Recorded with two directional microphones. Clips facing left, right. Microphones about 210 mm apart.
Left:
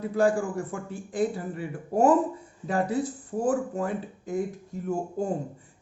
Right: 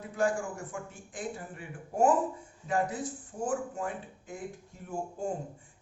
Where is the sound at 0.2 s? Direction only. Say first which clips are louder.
Left 6 dB; 30° left (ahead or behind).